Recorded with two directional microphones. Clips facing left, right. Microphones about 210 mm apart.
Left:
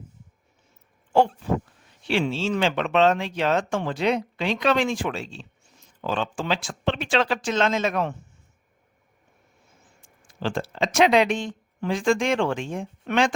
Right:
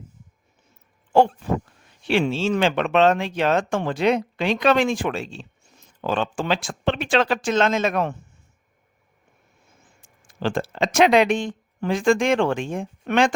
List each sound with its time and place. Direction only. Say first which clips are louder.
2.0 s speech: right 3 dB; 55° right (ahead or behind)
10.0 s speech: right 3 dB; 50° right (ahead or behind)